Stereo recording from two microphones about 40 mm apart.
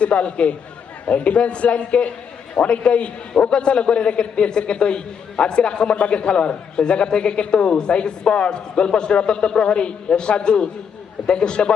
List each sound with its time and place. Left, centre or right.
0.0 s a man's voice: left